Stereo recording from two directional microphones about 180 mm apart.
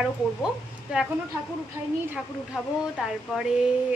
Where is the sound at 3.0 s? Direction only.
Centre (ahead or behind).